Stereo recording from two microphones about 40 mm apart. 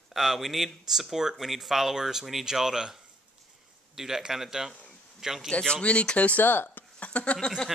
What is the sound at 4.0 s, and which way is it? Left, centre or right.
Speech, centre.